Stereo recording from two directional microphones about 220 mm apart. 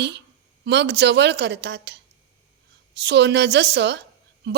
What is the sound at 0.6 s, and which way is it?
A woman's voice, 50° right (ahead or behind).